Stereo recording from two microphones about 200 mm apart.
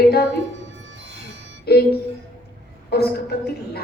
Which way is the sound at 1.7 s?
50° left (ahead or behind).